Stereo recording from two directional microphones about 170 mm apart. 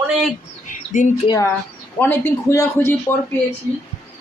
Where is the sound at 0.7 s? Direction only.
45° left (ahead or behind).